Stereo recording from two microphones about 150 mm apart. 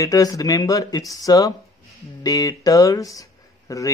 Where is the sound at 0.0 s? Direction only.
25° left (ahead or behind).